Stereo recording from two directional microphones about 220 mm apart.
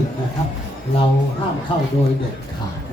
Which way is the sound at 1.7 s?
25° left (ahead or behind).